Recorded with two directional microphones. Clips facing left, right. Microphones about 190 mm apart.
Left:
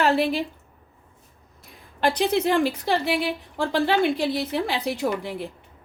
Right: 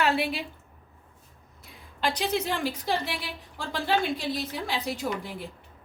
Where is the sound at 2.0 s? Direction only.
55° left (ahead or behind).